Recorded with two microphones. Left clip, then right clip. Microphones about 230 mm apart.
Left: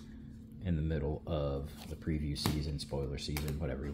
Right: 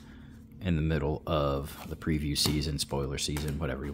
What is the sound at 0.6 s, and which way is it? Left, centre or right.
Speech, right.